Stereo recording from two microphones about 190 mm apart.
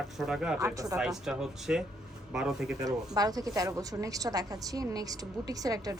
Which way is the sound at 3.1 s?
20° right (ahead or behind).